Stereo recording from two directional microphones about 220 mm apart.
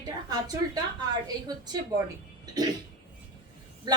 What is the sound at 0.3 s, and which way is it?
Speech, 15° right (ahead or behind).